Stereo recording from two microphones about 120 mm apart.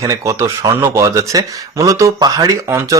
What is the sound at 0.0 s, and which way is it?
Speech, 30° right (ahead or behind).